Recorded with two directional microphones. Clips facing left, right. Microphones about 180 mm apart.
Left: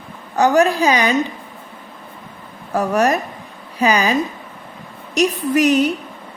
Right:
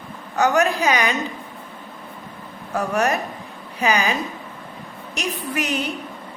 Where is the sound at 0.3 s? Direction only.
35° left (ahead or behind).